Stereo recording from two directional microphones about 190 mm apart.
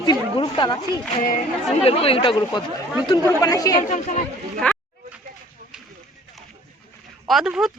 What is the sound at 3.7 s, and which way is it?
Speech, 40° left (ahead or behind).